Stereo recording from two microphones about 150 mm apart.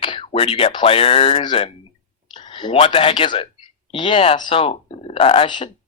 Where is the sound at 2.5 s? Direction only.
35° left (ahead or behind).